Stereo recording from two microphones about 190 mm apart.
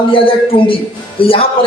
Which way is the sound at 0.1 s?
30° left (ahead or behind).